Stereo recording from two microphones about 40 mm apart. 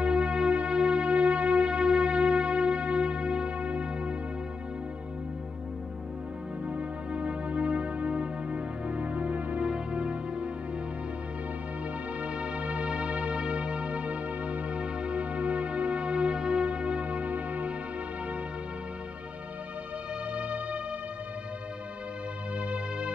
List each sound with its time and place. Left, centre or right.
0.0 s music: right
6.7 s music: right
12.2 s music: right
20.3 s music: right
22.7 s music: right